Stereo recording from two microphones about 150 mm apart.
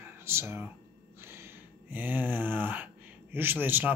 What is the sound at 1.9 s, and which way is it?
Speech, 10° right (ahead or behind).